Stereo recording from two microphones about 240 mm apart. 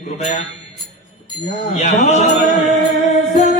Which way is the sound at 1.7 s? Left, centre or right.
Left.